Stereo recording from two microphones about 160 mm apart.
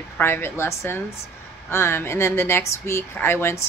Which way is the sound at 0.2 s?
15° left (ahead or behind).